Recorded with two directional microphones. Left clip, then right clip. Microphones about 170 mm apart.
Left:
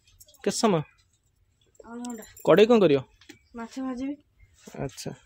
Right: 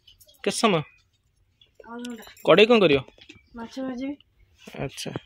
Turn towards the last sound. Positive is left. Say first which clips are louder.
# right 2 dB
turn(degrees=10)  # may be behind; listen again after turning